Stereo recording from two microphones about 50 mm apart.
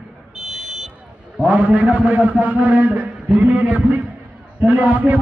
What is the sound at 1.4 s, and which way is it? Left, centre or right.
A man's voice, right.